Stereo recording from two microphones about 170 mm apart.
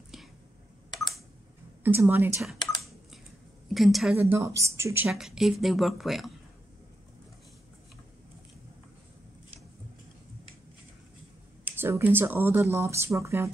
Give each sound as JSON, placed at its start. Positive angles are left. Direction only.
{"t": 0.8, "sound": "a sound", "side_deg": 25}
{"t": 1.8, "sound": "speech", "side_deg": -10}
{"t": 3.7, "sound": "speech", "side_deg": 0}
{"t": 4.2, "sound": "speech", "side_deg": -15}
{"t": 5.1, "sound": "speech", "side_deg": 0}
{"t": 11.8, "sound": "speech", "side_deg": -10}